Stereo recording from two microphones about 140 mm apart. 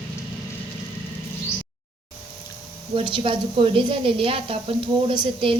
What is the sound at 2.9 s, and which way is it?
A woman's voice, 35° right (ahead or behind).